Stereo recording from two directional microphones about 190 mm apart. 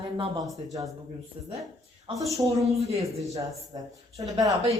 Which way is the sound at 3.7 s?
25° right (ahead or behind).